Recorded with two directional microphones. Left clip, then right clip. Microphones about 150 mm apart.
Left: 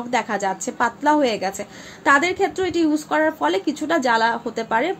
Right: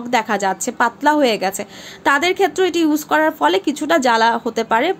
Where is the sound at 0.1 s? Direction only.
30° right (ahead or behind).